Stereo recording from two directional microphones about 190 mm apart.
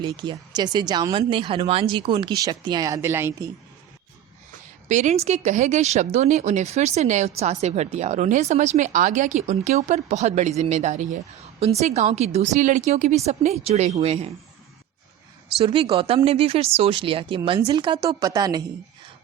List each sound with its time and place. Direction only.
0.0 s speech: 25° right (ahead or behind)
4.9 s speech: 40° right (ahead or behind)
15.5 s speech: 30° right (ahead or behind)